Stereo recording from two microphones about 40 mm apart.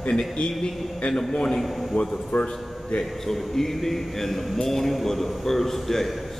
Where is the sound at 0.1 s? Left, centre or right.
Centre.